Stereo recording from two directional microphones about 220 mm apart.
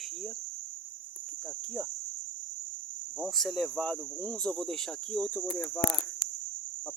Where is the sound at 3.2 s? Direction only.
Centre (ahead or behind).